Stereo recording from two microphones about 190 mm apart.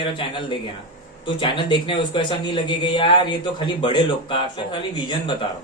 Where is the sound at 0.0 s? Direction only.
25° left (ahead or behind).